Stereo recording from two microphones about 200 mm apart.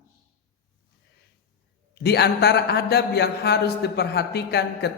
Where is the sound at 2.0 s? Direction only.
55° left (ahead or behind).